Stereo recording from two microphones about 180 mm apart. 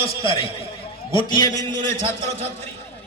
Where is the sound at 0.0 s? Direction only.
30° left (ahead or behind).